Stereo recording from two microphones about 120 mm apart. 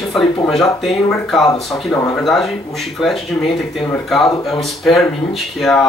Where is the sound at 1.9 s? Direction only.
20° left (ahead or behind).